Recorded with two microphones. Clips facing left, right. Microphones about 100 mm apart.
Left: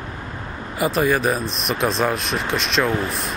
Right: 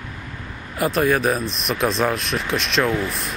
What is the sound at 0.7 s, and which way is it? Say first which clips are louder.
Speech: even; centre (ahead or behind).